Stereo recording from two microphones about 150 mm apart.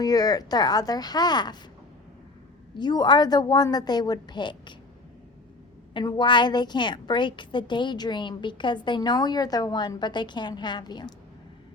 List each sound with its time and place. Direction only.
0.0 s a woman's voice: 25° left (ahead or behind)
2.7 s a woman's voice: 30° left (ahead or behind)
5.9 s a woman's voice: 30° left (ahead or behind)